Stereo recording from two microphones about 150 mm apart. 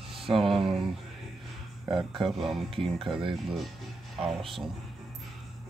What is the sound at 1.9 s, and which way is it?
Speech, 35° right (ahead or behind).